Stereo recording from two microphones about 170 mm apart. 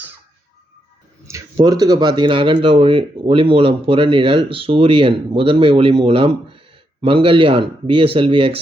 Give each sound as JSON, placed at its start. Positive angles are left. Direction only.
{"t": 1.3, "sound": "speech", "side_deg": -25}